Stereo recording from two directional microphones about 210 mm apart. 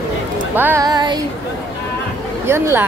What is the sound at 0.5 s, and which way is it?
Speech, 10° right (ahead or behind).